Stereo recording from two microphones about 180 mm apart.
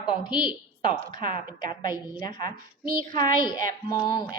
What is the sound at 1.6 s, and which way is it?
A woman's voice, 25° left (ahead or behind).